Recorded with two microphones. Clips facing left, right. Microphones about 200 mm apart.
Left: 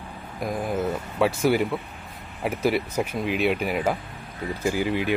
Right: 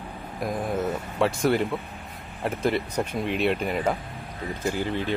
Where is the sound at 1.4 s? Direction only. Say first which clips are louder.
Left 1 dB; centre (ahead or behind).